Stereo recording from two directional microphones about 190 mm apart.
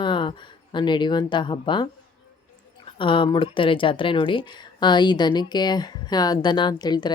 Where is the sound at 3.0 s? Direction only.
25° left (ahead or behind).